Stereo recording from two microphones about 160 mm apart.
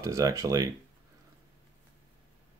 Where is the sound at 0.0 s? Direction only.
20° right (ahead or behind).